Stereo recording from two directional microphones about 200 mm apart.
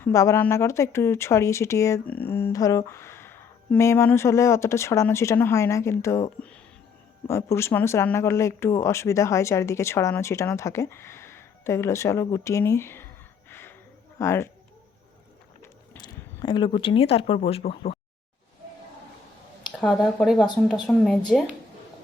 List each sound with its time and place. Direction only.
0.0 s speech: 15° left (ahead or behind)
13.5 s a sound: 10° left (ahead or behind)
14.2 s speech: 15° left (ahead or behind)
16.0 s speech: 20° left (ahead or behind)
19.8 s speech: centre (ahead or behind)